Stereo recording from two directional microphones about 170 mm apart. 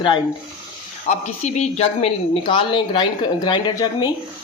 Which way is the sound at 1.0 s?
40° left (ahead or behind).